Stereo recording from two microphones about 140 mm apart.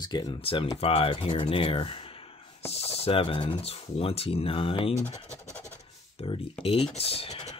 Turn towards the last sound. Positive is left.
turn(degrees=45)  # may be behind; listen again after turning